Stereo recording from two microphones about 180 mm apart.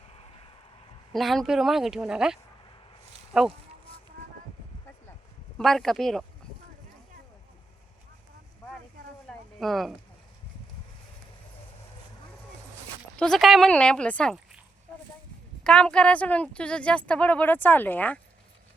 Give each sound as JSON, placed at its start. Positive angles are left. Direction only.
{"t": 0.1, "sound": "vehicle", "side_deg": 35}
{"t": 1.1, "sound": "speech", "side_deg": 0}
{"t": 5.5, "sound": "speech", "side_deg": 0}
{"t": 9.2, "sound": "a sound", "side_deg": 0}
{"t": 13.1, "sound": "speech", "side_deg": 5}
{"t": 15.6, "sound": "speech", "side_deg": 5}